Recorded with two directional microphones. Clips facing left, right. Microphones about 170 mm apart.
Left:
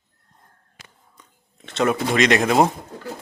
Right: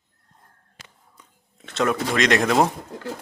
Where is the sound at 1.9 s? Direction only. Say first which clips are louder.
Left 2 dB; 10° left (ahead or behind).